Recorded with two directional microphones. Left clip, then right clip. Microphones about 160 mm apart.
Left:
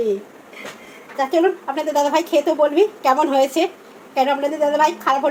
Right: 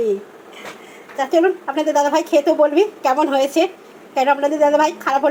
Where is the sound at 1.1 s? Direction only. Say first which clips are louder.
Right 1 dB; 15° right (ahead or behind).